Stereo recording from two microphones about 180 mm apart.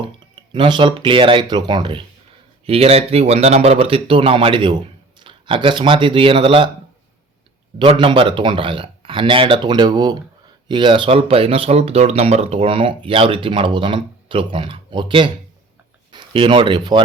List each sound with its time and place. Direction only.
0.5 s a man's voice: 25° right (ahead or behind)
7.8 s a man's voice: 25° right (ahead or behind)